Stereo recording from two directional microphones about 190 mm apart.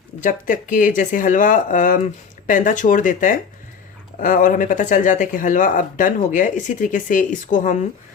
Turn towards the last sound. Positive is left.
turn(degrees=40)  # may be behind; listen again after turning